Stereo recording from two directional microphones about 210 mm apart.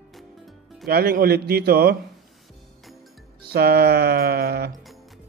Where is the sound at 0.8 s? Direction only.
45° right (ahead or behind).